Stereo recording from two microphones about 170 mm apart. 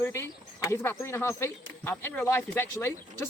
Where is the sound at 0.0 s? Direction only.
15° left (ahead or behind).